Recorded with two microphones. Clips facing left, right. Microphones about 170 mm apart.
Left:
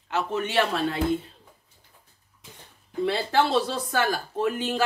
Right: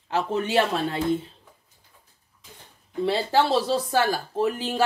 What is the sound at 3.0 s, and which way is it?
Speech, 30° right (ahead or behind).